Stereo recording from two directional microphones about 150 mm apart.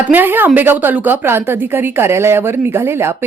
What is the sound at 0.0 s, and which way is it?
A woman's voice, 15° right (ahead or behind).